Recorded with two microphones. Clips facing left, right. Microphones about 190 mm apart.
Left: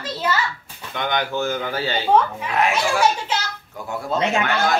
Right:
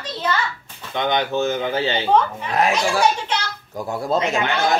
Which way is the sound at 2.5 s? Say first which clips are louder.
Right 1 dB; 35° right (ahead or behind).